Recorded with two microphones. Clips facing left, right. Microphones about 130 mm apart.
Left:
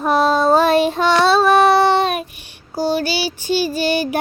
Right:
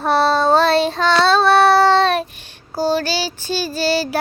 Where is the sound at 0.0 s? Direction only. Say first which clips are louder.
Left 1 dB; 5° left (ahead or behind).